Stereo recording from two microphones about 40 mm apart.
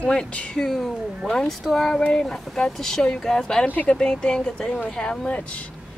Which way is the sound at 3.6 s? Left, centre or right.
Left.